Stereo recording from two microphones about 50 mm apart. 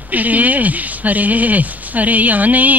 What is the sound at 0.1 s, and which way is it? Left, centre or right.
Speech, right.